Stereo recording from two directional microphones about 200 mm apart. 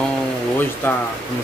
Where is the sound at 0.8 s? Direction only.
10° left (ahead or behind).